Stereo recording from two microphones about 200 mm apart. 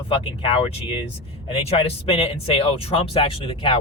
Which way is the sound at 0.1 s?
30° left (ahead or behind).